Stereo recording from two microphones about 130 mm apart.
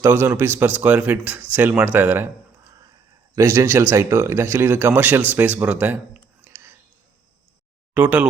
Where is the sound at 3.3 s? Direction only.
20° right (ahead or behind).